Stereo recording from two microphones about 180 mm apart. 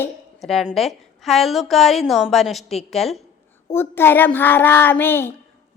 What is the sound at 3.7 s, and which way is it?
A child's voice, 10° left (ahead or behind).